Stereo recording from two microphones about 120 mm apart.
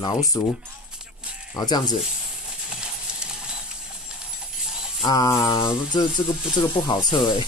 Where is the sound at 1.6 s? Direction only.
35° left (ahead or behind).